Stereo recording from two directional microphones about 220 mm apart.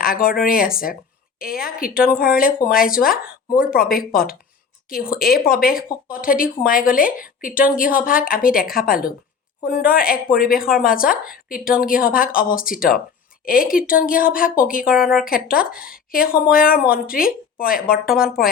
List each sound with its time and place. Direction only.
0.0 s speech: 40° left (ahead or behind)
14.8 s a woman's voice: 5° right (ahead or behind)
15.2 s speech: 40° left (ahead or behind)